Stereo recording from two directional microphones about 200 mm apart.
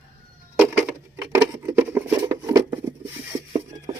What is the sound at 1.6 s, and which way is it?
Patter, 10° right (ahead or behind).